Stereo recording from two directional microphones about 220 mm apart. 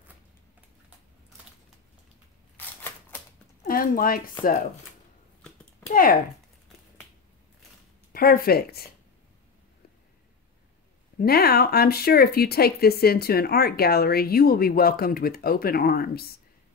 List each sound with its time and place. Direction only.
2.5 s a sound: 10° left (ahead or behind)
3.6 s speech: 40° left (ahead or behind)
8.1 s speech: 40° left (ahead or behind)
11.1 s speech: 45° left (ahead or behind)